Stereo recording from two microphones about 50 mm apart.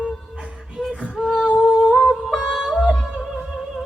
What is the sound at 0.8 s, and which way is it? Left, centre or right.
Music, centre.